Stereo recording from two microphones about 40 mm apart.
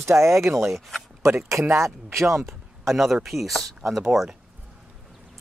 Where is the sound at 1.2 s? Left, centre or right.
Right.